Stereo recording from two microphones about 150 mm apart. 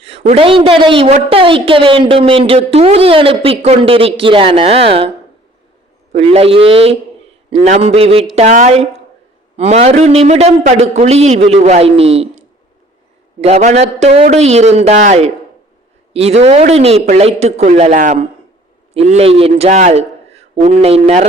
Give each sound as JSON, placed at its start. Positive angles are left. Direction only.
{"t": 0.0, "sound": "a sound", "side_deg": -40}
{"t": 0.3, "sound": "speech", "side_deg": -40}
{"t": 6.1, "sound": "a man's voice", "side_deg": -45}
{"t": 18.9, "sound": "a man's voice", "side_deg": -45}